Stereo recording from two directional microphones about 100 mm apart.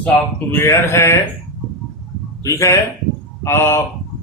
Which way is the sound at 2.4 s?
30° left (ahead or behind).